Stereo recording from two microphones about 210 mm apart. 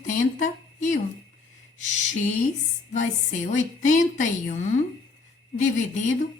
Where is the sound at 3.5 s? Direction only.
35° left (ahead or behind).